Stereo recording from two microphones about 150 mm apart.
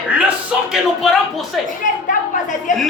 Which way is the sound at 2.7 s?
60° left (ahead or behind).